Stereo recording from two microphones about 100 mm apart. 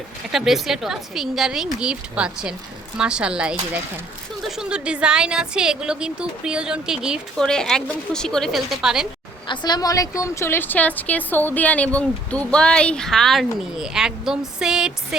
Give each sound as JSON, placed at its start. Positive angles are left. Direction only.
{"t": 0.3, "sound": "a woman's voice", "side_deg": -5}
{"t": 7.3, "sound": "a woman's voice", "side_deg": 5}
{"t": 9.5, "sound": "a woman's voice", "side_deg": 45}